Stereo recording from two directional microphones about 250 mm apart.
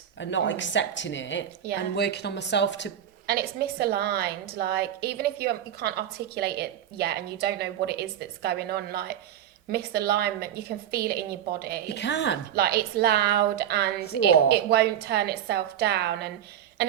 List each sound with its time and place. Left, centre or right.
0.2 s speech: left
3.2 s a woman's voice: right
11.9 s speech: left
12.5 s a woman's voice: right